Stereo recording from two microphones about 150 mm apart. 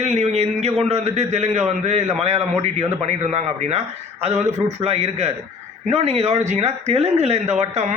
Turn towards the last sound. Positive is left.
turn(degrees=-50)  # may be behind; listen again after turning